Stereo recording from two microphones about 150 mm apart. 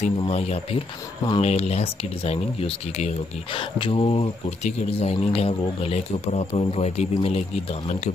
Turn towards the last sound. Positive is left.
turn(degrees=45)  # may be behind; listen again after turning